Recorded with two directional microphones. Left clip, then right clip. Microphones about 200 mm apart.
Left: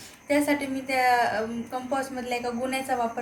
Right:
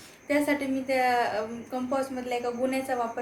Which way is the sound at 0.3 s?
5° right (ahead or behind).